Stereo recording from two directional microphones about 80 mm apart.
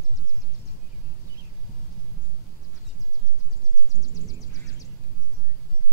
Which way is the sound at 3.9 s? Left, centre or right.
Left.